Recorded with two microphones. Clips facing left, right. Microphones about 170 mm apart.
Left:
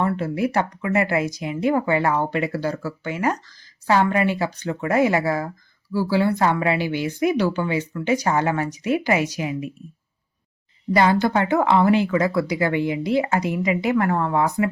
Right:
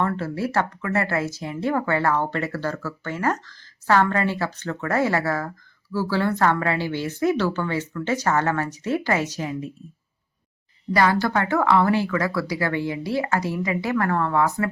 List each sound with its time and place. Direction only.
0.0 s speech: 15° left (ahead or behind)
10.9 s speech: 20° left (ahead or behind)